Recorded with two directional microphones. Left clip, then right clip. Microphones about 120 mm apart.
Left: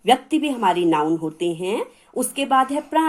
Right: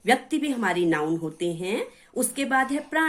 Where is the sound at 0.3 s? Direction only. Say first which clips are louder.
Left 6 dB; 40° left (ahead or behind).